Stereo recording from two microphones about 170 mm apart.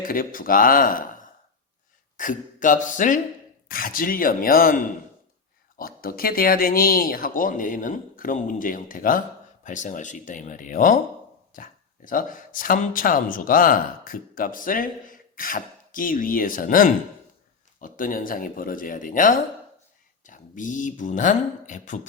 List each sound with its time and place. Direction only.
0.0 s speech: 55° left (ahead or behind)
2.1 s speech: 50° left (ahead or behind)